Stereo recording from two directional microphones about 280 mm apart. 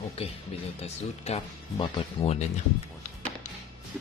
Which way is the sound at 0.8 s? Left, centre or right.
Left.